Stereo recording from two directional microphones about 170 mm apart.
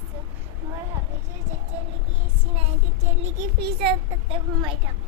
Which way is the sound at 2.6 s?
40° right (ahead or behind).